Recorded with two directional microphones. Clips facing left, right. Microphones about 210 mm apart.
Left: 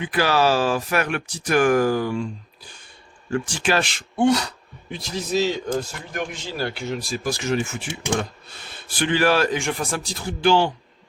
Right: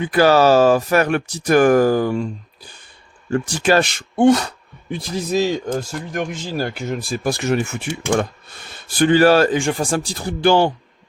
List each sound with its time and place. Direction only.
0.0 s speech: 45° right (ahead or behind)
3.3 s speech: 40° right (ahead or behind); by 7.9 s 60° right (ahead or behind)
9.0 s speech: 40° right (ahead or behind)